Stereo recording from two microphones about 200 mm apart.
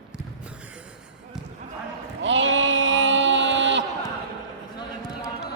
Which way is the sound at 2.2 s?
65° right (ahead or behind).